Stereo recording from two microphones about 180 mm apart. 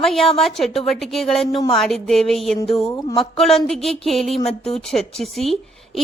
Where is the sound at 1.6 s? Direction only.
20° left (ahead or behind).